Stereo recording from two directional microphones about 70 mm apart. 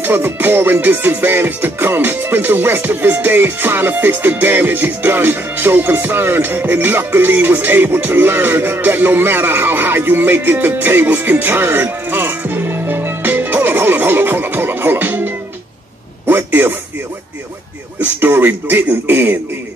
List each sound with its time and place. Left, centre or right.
0.0 s music: right
16.3 s a sound: right
18.2 s speech: right